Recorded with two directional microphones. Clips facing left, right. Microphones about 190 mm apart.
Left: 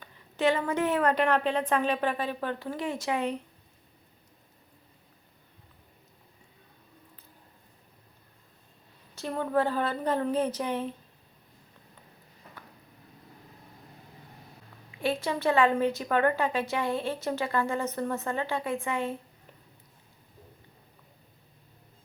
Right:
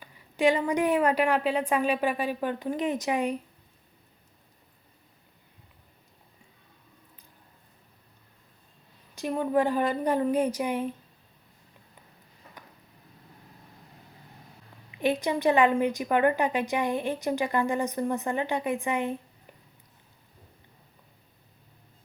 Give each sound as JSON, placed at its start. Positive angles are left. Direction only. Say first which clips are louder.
{"t": 0.0, "sound": "a woman's voice", "louder": "right 3 dB", "side_deg": -15}
{"t": 9.1, "sound": "a woman's voice", "louder": "right 2 dB", "side_deg": -15}
{"t": 15.0, "sound": "a woman's voice", "louder": "right 3 dB", "side_deg": -15}